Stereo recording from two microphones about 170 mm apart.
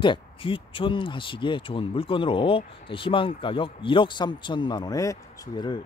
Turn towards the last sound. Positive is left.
turn(degrees=20)  # may be behind; listen again after turning